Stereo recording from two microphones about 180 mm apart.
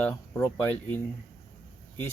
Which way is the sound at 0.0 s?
10° left (ahead or behind).